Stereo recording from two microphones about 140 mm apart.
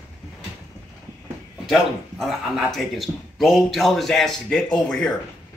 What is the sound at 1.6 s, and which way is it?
A man's voice, centre (ahead or behind).